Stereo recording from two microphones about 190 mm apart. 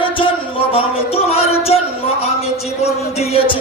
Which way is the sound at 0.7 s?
30° left (ahead or behind).